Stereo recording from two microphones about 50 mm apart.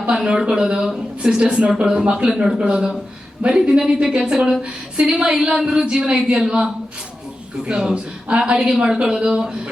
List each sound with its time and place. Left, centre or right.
0.3 s speech: centre
7.7 s a woman's voice: centre